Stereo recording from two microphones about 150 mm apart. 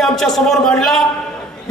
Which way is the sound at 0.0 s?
Centre (ahead or behind).